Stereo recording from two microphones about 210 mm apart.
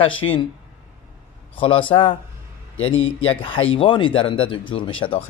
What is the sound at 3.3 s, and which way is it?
Speech, 25° left (ahead or behind).